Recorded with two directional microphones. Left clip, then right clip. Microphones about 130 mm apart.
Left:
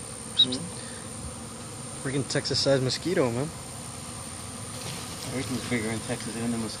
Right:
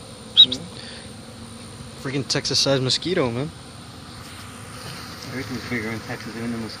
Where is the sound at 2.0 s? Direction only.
30° right (ahead or behind).